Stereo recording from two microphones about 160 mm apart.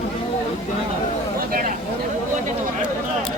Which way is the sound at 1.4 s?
60° right (ahead or behind).